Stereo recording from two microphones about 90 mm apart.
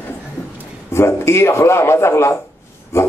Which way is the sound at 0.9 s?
30° left (ahead or behind).